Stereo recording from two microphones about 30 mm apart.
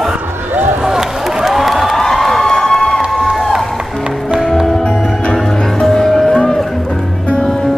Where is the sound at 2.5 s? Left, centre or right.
Centre.